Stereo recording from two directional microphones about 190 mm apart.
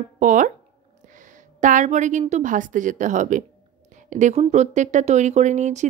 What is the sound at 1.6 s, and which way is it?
Speech, 40° right (ahead or behind).